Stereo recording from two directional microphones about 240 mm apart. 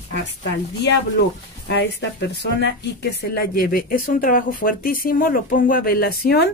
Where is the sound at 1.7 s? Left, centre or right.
Left.